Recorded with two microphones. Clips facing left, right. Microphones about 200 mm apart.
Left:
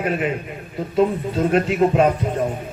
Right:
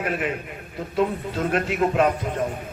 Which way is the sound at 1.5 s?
35° left (ahead or behind).